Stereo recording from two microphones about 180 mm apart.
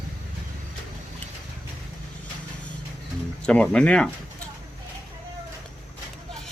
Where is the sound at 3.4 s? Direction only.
5° left (ahead or behind).